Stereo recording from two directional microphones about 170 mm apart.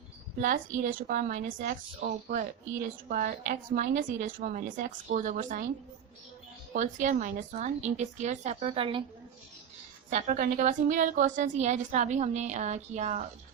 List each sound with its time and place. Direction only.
0.4 s a woman's voice: 50° right (ahead or behind)
6.7 s a woman's voice: 45° right (ahead or behind)
10.1 s a woman's voice: 50° right (ahead or behind)